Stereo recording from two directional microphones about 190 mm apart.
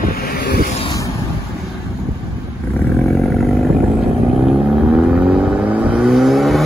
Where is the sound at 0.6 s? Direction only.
35° left (ahead or behind).